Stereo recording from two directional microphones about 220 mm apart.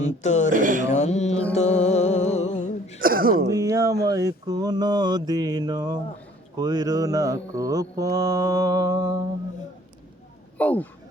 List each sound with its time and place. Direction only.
0.0 s speech: 30° left (ahead or behind)
0.5 s speech: 35° right (ahead or behind)
0.9 s speech: 30° left (ahead or behind)
1.5 s music: 30° left (ahead or behind)
3.0 s a sound: 40° right (ahead or behind)
3.5 s mantra: 15° right (ahead or behind)
10.6 s speech: 5° left (ahead or behind)